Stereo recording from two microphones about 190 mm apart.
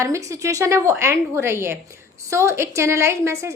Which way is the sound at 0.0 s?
15° right (ahead or behind).